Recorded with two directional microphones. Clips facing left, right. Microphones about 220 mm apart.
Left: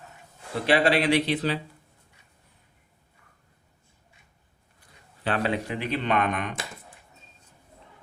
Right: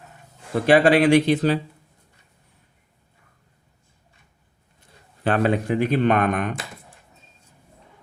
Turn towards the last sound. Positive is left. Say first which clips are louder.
# right 6 dB
turn(degrees=-50)  # may be behind; listen again after turning